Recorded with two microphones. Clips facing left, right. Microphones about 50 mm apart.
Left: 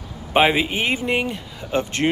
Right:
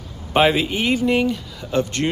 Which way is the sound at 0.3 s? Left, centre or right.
Centre.